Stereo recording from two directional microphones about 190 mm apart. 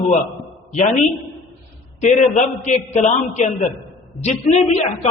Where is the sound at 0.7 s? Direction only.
40° left (ahead or behind).